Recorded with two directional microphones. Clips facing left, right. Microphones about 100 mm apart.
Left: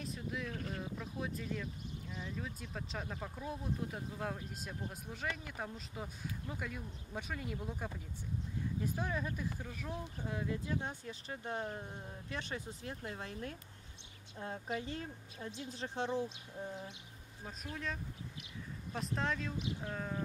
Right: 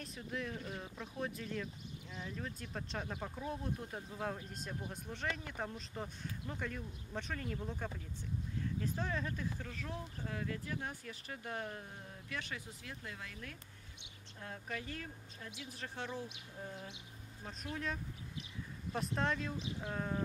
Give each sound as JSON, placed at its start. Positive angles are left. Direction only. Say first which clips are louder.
{"t": 0.0, "sound": "speech", "louder": "left 1 dB", "side_deg": 0}
{"t": 18.9, "sound": "speech", "louder": "right 1 dB", "side_deg": 0}